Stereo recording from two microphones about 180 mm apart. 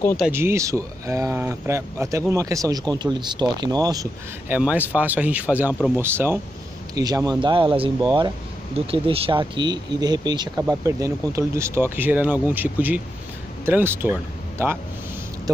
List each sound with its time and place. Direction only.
0.3 s speech: 15° right (ahead or behind)
4.6 s speech: 5° right (ahead or behind)